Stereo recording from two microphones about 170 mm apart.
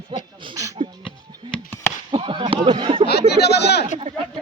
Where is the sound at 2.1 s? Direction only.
30° right (ahead or behind).